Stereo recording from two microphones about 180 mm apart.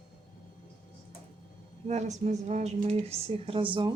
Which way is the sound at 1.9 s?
40° right (ahead or behind).